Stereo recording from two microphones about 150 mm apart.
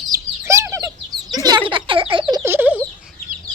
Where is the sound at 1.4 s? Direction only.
30° right (ahead or behind).